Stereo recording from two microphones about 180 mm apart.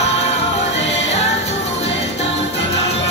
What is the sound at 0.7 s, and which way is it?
Music, 85° left.